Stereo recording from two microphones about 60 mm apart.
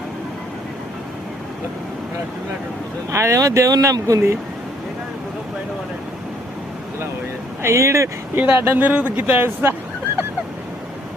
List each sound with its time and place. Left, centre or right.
3.1 s speech: right
7.6 s speech: right
8.4 s speech: right